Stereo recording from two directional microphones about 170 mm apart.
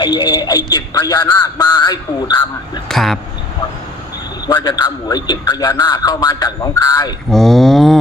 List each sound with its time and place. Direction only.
0.0 s a man's voice: 25° left (ahead or behind)
2.9 s speech: centre (ahead or behind)
4.4 s a man's voice: 25° left (ahead or behind)
7.3 s speech: centre (ahead or behind)